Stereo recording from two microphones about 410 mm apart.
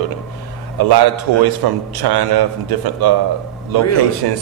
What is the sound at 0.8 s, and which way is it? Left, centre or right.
A man's voice, right.